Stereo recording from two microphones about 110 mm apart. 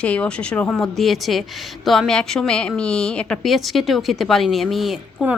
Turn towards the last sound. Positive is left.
turn(degrees=-5)  # may be behind; listen again after turning